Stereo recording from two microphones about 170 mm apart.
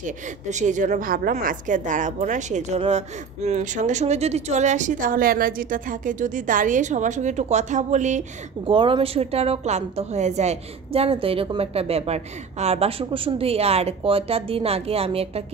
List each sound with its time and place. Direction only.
0.0 s speech: 45° right (ahead or behind)
8.6 s a woman's voice: 30° right (ahead or behind)